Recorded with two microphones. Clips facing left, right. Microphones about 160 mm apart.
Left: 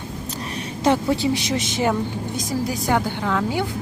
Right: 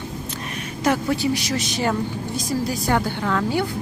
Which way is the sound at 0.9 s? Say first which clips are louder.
Left 2 dB; 25° left (ahead or behind).